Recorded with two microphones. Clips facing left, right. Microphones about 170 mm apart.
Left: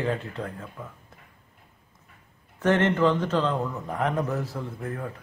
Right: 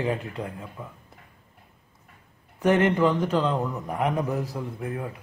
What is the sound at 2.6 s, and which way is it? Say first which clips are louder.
A man's voice: right 1 dB; 10° right (ahead or behind).